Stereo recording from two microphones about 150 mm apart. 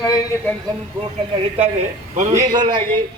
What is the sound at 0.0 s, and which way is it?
Speech, 25° left (ahead or behind).